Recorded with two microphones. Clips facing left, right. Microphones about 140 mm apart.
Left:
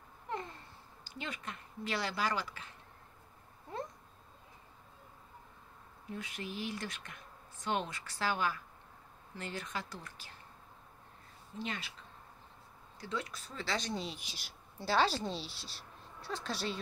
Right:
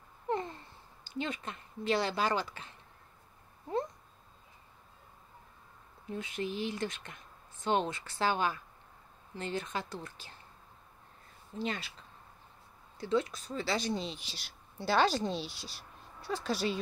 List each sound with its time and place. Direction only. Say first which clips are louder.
0.3 s babbling: right 7 dB; 30° right (ahead or behind)
1.0 s speech: right 6 dB; 25° right (ahead or behind)
6.0 s speech: right 6 dB; 25° right (ahead or behind)
11.5 s speech: right 5 dB; 35° right (ahead or behind)
13.0 s speech: right 9 dB; 25° right (ahead or behind)
13.7 s speech: right 4 dB; 10° right (ahead or behind)
13.9 s speech: right 2 dB; 5° left (ahead or behind)